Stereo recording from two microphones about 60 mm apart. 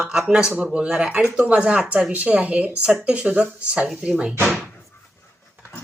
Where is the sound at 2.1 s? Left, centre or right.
Right.